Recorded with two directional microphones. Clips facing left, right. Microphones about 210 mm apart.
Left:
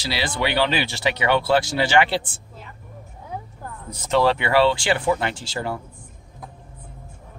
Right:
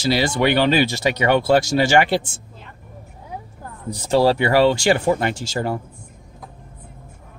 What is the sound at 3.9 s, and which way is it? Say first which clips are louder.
Speech: right 3 dB; 35° right (ahead or behind).